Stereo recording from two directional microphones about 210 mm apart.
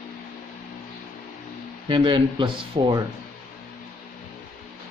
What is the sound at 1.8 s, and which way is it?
Speech, 25° right (ahead or behind).